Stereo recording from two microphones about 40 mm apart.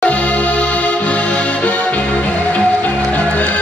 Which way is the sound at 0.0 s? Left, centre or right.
Left.